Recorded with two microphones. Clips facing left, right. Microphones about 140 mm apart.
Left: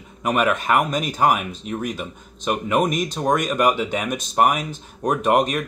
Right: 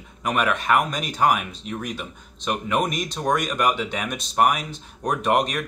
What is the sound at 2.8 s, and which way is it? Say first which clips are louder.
Speech: left 5 dB; 40° left (ahead or behind).